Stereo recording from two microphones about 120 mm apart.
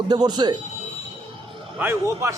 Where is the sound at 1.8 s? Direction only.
20° right (ahead or behind).